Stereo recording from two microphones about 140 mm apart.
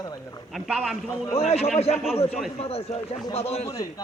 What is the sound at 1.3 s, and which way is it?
Speech, 45° left (ahead or behind).